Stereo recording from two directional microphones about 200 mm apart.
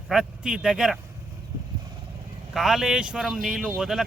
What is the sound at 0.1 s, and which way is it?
Speech, 5° right (ahead or behind).